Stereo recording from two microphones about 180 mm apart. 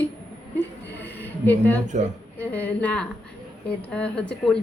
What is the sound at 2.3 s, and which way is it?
A woman's voice, 10° left (ahead or behind).